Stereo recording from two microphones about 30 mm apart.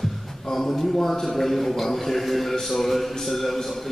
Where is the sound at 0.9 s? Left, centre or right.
Left.